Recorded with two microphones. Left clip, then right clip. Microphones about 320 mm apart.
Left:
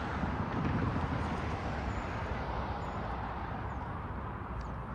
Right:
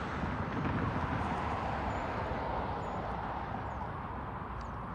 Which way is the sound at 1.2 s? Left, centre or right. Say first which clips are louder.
Right 3 dB; centre.